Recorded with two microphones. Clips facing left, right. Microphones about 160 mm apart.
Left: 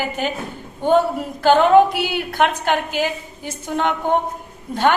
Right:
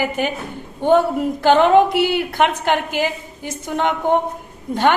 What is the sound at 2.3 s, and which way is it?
A woman's voice, 15° right (ahead or behind).